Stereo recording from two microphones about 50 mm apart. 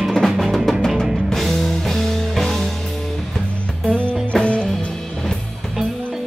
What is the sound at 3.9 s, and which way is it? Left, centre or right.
Music, left.